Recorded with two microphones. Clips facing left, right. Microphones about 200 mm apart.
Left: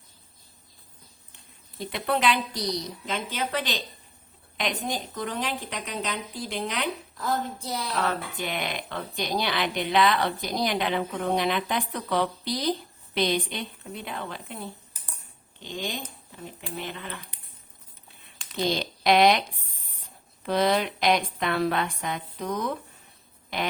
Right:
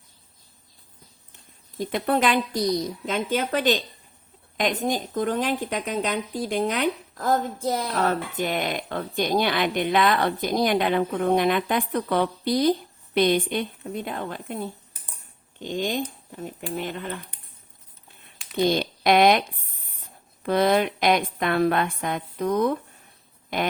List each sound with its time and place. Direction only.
1.8 s speech: 45° right (ahead or behind)
18.5 s speech: 55° right (ahead or behind)